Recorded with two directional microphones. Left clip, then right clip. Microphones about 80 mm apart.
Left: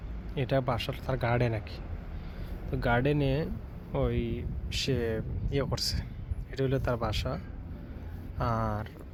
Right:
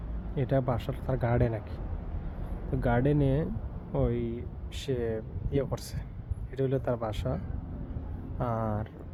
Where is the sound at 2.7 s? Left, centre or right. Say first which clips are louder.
Even; centre.